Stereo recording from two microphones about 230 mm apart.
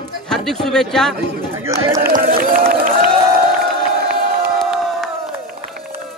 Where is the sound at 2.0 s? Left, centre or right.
Right.